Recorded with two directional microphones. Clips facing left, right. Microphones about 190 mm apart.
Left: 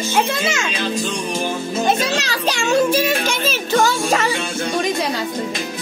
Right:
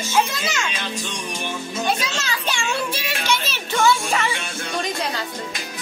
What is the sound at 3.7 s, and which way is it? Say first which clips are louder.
Music: left 2 dB; 40° left (ahead or behind).